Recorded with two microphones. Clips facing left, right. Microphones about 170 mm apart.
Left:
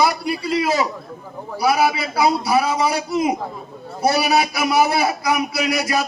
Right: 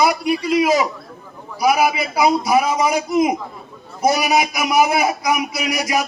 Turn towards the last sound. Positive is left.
turn(degrees=-15)  # may be behind; listen again after turning